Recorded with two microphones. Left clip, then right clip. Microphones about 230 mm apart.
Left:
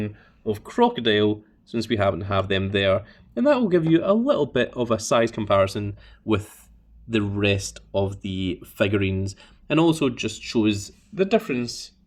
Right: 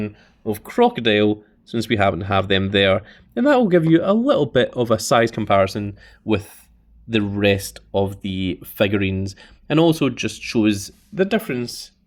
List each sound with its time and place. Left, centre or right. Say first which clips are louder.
0.0 s speech: right 2 dB; right